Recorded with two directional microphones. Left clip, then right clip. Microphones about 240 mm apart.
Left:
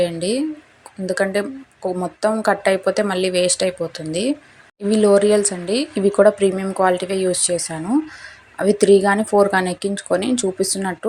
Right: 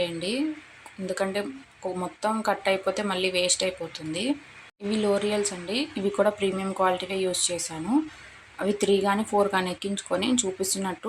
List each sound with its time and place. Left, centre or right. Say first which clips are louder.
0.0 s speech: left 8 dB; left